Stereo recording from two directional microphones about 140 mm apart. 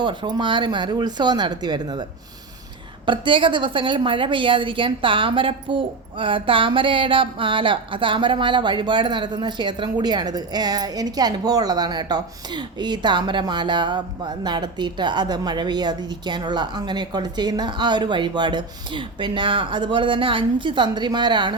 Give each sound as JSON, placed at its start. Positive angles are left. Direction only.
{"t": 0.0, "sound": "a woman's voice", "side_deg": -35}
{"t": 3.1, "sound": "a woman's voice", "side_deg": -35}